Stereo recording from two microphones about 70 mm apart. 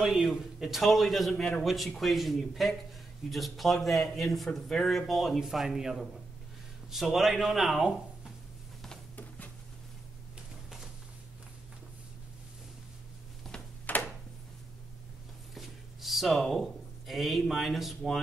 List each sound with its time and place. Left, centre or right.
0.0 s a man's voice: centre
13.9 s a sound: left
15.5 s speech: centre